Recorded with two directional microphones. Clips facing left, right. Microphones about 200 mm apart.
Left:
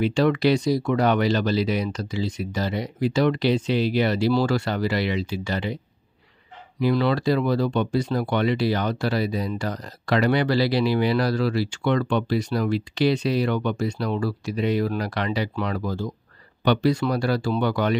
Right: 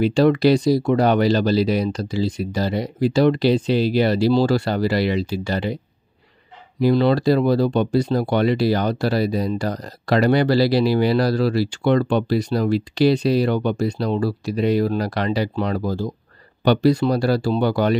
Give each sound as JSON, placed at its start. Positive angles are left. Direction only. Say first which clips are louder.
{"t": 0.0, "sound": "speech", "louder": "right 4 dB", "side_deg": -35}
{"t": 6.8, "sound": "speech", "louder": "right 5 dB", "side_deg": -35}